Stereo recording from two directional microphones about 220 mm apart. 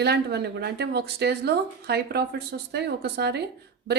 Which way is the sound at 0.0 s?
50° right (ahead or behind).